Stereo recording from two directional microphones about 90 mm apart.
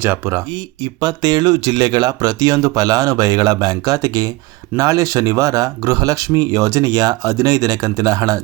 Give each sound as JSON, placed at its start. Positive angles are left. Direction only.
{"t": 0.0, "sound": "speech", "side_deg": -30}
{"t": 1.0, "sound": "speech", "side_deg": -50}